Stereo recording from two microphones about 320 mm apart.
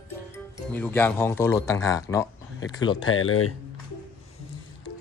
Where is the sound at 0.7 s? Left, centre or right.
Centre.